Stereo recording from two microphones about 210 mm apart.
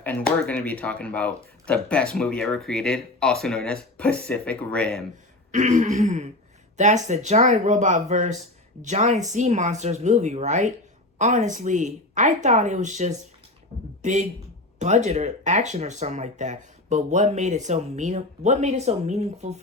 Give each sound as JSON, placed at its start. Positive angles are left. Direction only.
{"t": 0.0, "sound": "speech", "side_deg": 5}
{"t": 5.5, "sound": "a man's voice", "side_deg": -35}